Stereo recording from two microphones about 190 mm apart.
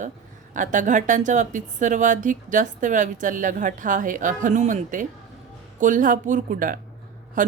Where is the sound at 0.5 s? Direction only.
40° right (ahead or behind).